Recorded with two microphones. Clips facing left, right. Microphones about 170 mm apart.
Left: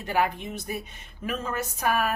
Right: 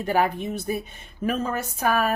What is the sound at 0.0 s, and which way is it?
Speech, 45° right (ahead or behind).